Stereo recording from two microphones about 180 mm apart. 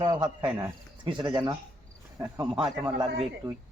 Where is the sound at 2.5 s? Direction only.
5° right (ahead or behind).